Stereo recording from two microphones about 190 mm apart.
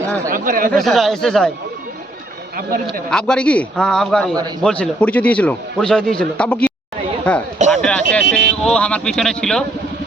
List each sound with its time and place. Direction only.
0.3 s speech: 45° right (ahead or behind)
0.7 s speech: centre (ahead or behind)
2.6 s speech: 50° right (ahead or behind)
3.1 s a man's voice: 5° left (ahead or behind)